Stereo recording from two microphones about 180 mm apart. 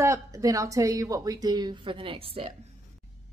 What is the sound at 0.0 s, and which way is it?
Speech, 15° right (ahead or behind).